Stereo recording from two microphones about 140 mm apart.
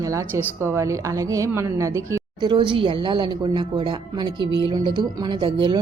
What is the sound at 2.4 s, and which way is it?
Speech, 35° right (ahead or behind).